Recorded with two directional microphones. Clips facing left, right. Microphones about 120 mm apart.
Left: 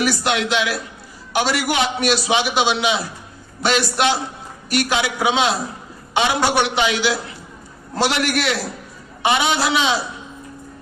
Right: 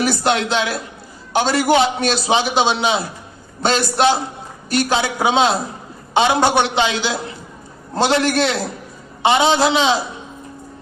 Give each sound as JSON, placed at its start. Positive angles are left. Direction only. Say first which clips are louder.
{"t": 0.0, "sound": "a man's voice", "louder": "right 2 dB", "side_deg": -30}